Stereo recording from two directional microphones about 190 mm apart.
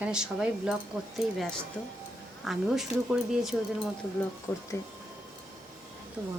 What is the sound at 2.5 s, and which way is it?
Speech, centre (ahead or behind).